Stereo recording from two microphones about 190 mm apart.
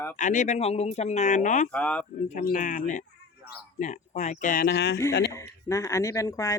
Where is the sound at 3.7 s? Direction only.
40° left (ahead or behind); by 4.9 s 60° left (ahead or behind).